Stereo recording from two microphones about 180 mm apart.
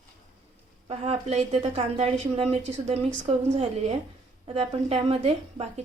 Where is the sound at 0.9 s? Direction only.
35° right (ahead or behind).